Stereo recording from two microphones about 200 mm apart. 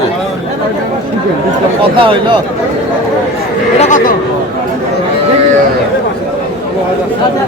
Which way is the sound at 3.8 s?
40° left (ahead or behind).